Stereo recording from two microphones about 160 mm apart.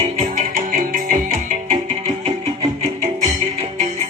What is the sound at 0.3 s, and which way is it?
Music, 55° right (ahead or behind).